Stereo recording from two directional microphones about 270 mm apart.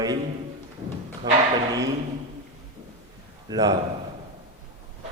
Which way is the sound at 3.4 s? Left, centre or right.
Centre.